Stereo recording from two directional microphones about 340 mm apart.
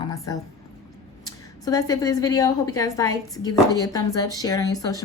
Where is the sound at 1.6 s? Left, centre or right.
Centre.